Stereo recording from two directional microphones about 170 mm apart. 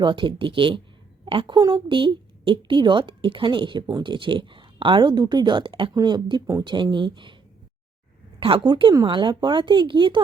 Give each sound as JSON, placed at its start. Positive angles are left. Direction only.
{"t": 0.0, "sound": "a woman's voice", "side_deg": -30}
{"t": 8.4, "sound": "a woman's voice", "side_deg": -30}